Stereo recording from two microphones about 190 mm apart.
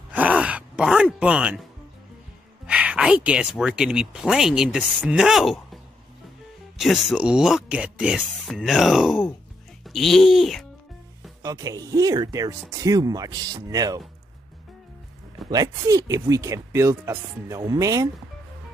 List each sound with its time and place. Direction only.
0.1 s a sound: 5° right (ahead or behind)
2.6 s speech: 5° right (ahead or behind)
6.8 s speech: centre (ahead or behind)
11.4 s speech: 20° right (ahead or behind)
15.5 s speech: 20° right (ahead or behind)